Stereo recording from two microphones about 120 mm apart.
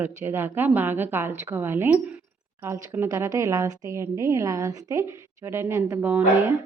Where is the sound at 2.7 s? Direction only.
25° right (ahead or behind).